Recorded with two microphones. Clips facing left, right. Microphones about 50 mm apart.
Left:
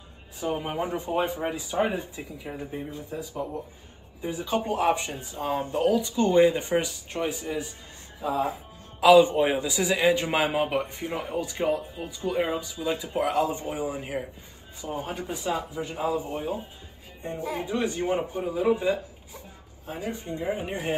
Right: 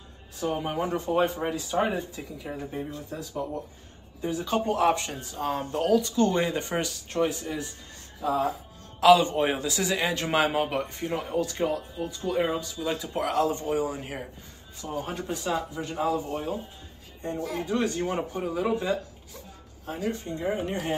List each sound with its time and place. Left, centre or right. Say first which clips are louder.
0.4 s a man's voice: even; centre